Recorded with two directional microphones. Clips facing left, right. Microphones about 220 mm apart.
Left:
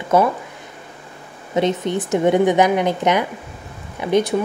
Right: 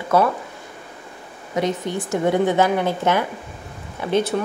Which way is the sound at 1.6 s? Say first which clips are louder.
Left 4 dB; 20° left (ahead or behind).